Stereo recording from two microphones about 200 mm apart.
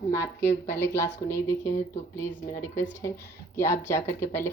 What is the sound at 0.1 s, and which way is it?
Speech, 15° left (ahead or behind).